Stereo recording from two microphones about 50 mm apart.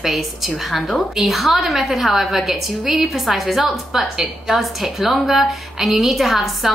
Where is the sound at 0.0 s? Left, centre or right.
Centre.